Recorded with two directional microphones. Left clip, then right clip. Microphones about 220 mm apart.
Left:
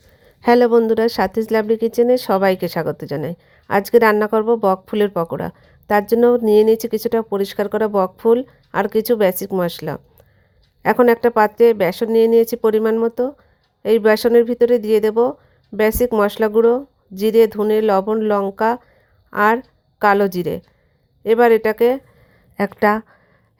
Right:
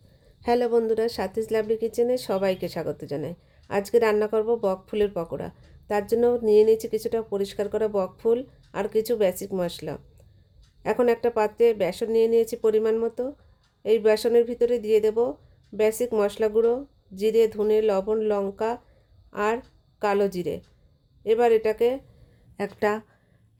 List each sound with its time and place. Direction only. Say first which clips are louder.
0.4 s speech: left 9 dB; 30° left (ahead or behind)